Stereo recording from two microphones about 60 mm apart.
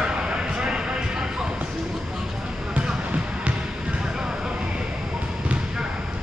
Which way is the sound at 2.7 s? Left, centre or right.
Centre.